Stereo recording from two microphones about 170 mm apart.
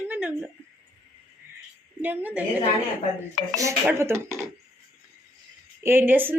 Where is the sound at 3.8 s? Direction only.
15° right (ahead or behind).